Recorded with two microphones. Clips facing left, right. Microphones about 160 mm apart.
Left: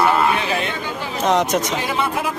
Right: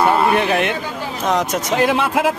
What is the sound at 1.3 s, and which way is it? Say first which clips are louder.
Speech: left 2 dB; centre (ahead or behind).